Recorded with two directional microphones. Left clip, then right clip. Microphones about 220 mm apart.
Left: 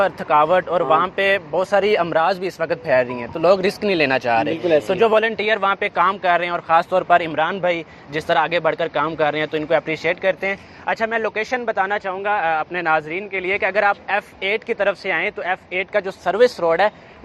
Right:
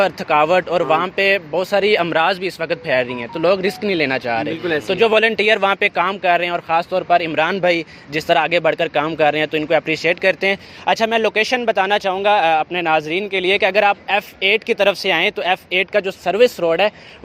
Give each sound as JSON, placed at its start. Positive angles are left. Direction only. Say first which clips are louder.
{"t": 0.0, "sound": "speech", "louder": "right 1 dB", "side_deg": -30}
{"t": 16.0, "sound": "speech", "louder": "right 2 dB", "side_deg": -30}